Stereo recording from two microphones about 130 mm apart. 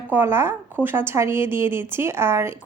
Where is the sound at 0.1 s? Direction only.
15° right (ahead or behind).